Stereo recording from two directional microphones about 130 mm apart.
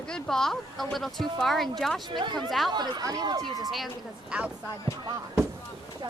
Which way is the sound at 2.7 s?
35° right (ahead or behind).